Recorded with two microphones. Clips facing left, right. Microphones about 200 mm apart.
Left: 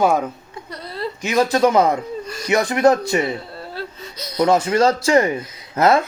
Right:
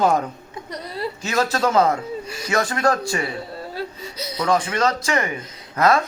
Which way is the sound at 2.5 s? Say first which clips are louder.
Left 5 dB; 20° left (ahead or behind).